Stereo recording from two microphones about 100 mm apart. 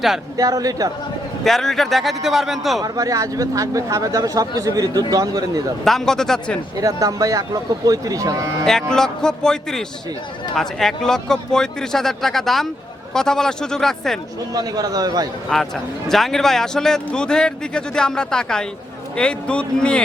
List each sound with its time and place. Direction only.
0.3 s speech: 35° right (ahead or behind)
1.5 s a man's voice: 5° left (ahead or behind)
2.8 s speech: 35° right (ahead or behind)
5.8 s a man's voice: 5° left (ahead or behind)
6.7 s speech: 35° right (ahead or behind)
8.6 s a man's voice: 5° left (ahead or behind)
14.5 s speech: 40° right (ahead or behind)
15.4 s a man's voice: 5° left (ahead or behind)